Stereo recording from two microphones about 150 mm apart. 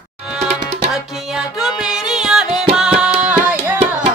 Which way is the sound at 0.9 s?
5° right (ahead or behind).